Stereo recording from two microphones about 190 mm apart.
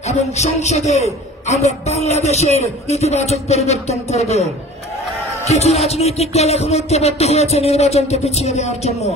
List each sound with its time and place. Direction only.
0.0 s a man's voice: 35° left (ahead or behind)
5.5 s a man's voice: 35° left (ahead or behind)